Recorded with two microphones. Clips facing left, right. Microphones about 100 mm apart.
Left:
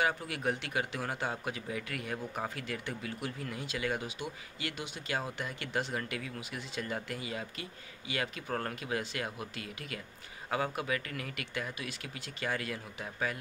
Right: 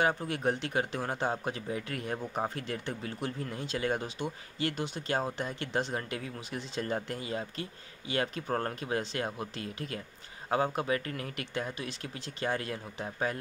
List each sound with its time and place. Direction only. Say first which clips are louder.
0.0 s speech: right 3 dB; 30° right (ahead or behind)